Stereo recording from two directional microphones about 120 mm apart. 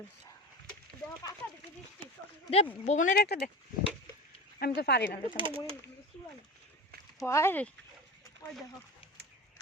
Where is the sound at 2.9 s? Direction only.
90° left.